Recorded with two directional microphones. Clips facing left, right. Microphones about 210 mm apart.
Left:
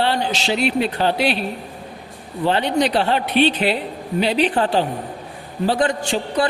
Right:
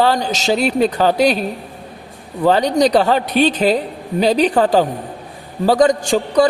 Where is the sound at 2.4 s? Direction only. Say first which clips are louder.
Right 5 dB; 40° right (ahead or behind).